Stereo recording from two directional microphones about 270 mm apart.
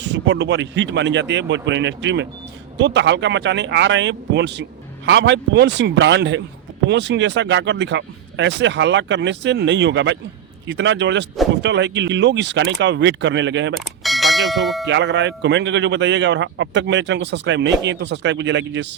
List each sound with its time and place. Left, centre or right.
0.0 s a man's voice: right
13.7 s bell: centre
14.8 s a man's voice: right